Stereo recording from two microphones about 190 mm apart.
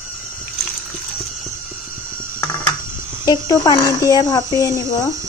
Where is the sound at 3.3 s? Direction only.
20° left (ahead or behind).